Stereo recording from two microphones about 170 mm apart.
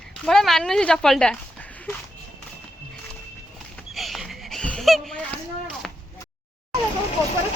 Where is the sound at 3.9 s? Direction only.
Centre (ahead or behind).